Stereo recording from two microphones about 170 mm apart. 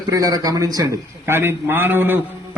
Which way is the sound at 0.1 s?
20° right (ahead or behind).